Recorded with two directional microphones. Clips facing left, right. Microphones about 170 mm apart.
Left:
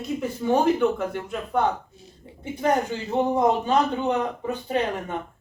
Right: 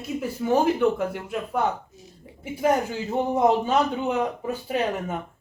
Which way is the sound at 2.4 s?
5° right (ahead or behind).